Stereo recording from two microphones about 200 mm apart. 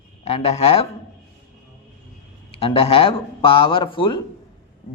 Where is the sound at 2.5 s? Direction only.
30° left (ahead or behind).